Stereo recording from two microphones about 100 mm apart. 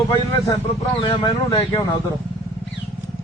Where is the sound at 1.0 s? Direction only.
50° left (ahead or behind).